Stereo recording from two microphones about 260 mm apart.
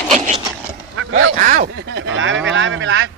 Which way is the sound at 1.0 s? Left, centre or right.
Right.